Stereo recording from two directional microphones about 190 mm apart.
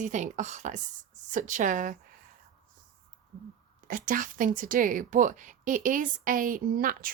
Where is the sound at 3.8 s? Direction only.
45° right (ahead or behind).